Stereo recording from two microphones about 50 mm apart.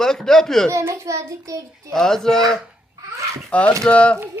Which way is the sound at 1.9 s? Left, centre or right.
Centre.